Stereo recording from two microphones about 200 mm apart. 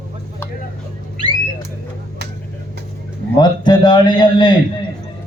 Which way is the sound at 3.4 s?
20° left (ahead or behind).